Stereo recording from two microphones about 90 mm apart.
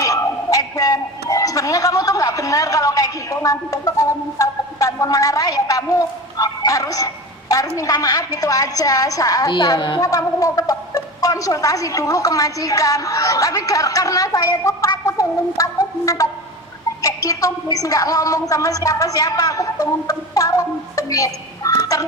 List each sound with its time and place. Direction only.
0.0 s a man's voice: 40° left (ahead or behind)
9.5 s a woman's voice: 50° left (ahead or behind)
10.0 s a woman's voice: 40° left (ahead or behind)
15.0 s a sound: 40° left (ahead or behind)
17.0 s a woman's voice: 40° left (ahead or behind)